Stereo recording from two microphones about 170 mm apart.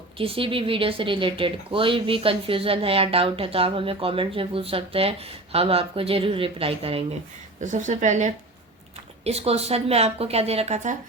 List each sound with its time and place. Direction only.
0.2 s speech: 30° right (ahead or behind)
7.6 s speech: 45° right (ahead or behind)